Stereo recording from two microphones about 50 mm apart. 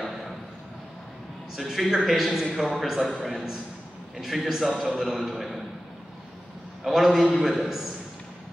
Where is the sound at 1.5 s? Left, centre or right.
Centre.